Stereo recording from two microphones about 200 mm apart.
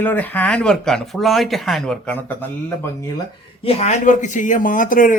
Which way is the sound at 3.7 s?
30° left (ahead or behind).